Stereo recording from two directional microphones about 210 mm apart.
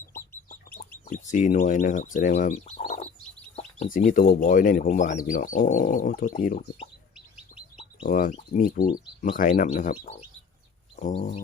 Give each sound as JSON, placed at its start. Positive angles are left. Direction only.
{"t": 0.8, "sound": "speech", "side_deg": 40}
{"t": 3.5, "sound": "bird", "side_deg": 35}
{"t": 3.9, "sound": "speech", "side_deg": 40}
{"t": 8.0, "sound": "speech", "side_deg": 40}
{"t": 10.9, "sound": "chicken", "side_deg": 35}